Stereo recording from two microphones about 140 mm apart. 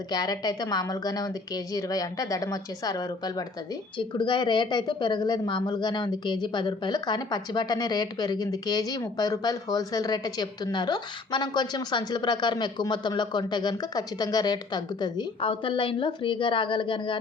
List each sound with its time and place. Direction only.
0.1 s a woman's voice: 30° left (ahead or behind)